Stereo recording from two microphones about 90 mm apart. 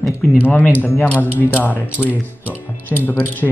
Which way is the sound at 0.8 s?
20° left (ahead or behind).